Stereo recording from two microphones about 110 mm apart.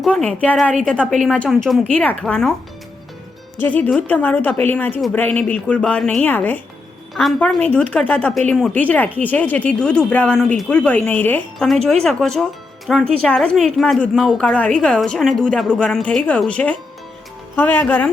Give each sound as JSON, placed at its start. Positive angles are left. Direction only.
{"t": 0.1, "sound": "a woman's voice", "side_deg": 10}
{"t": 1.9, "sound": "a woman's voice", "side_deg": 15}
{"t": 4.1, "sound": "a woman's voice", "side_deg": 15}
{"t": 7.1, "sound": "a woman's voice", "side_deg": 0}
{"t": 7.3, "sound": "a woman's voice", "side_deg": 10}
{"t": 8.4, "sound": "speech", "side_deg": 0}
{"t": 8.7, "sound": "a woman's voice", "side_deg": 15}
{"t": 11.9, "sound": "a woman's voice", "side_deg": 5}